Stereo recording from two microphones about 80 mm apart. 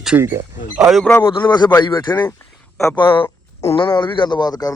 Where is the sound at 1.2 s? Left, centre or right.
Left.